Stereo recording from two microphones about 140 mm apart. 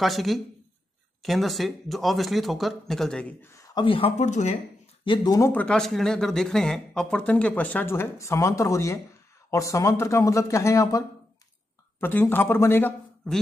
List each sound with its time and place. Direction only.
0.0 s speech: centre (ahead or behind)
3.4 s a sound: 25° left (ahead or behind)
3.8 s speech: 40° left (ahead or behind)
4.3 s speech: 55° left (ahead or behind)
5.0 s speech: 35° left (ahead or behind)
5.5 s speech: 10° left (ahead or behind)